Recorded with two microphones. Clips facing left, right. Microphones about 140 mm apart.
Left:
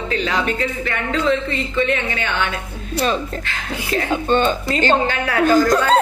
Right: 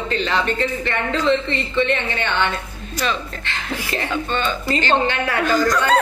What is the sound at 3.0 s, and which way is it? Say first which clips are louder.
Speech: left 4 dB; 40° left (ahead or behind).